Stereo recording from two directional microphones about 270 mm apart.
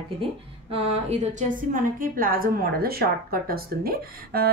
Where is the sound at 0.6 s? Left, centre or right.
Right.